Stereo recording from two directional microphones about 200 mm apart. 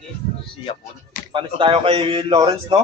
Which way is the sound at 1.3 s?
25° right (ahead or behind).